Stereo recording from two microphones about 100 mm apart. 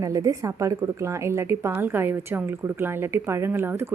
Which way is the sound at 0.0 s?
35° right (ahead or behind).